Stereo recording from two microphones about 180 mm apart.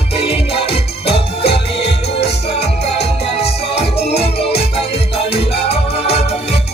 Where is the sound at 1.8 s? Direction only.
70° left (ahead or behind).